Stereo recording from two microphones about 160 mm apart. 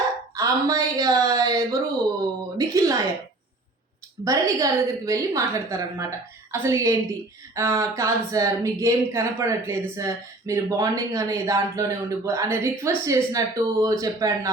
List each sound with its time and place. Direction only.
0.3 s a sound: 20° right (ahead or behind)
2.6 s speech: 20° right (ahead or behind)
4.2 s speech: 20° right (ahead or behind)